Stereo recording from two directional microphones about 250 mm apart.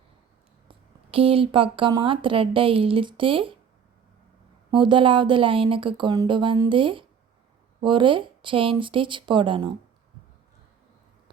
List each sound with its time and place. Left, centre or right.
0.7 s speech: right
4.7 s speech: centre